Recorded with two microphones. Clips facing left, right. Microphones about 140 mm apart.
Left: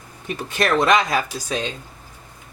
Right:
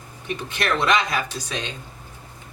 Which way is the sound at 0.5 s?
40° left (ahead or behind).